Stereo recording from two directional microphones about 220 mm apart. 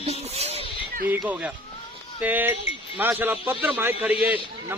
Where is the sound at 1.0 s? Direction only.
5° right (ahead or behind).